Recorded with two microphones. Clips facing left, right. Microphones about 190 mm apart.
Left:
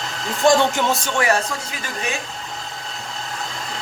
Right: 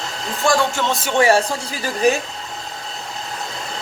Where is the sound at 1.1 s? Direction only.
30° right (ahead or behind).